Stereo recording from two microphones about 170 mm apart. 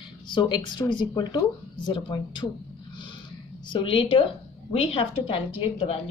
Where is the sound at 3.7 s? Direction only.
30° left (ahead or behind).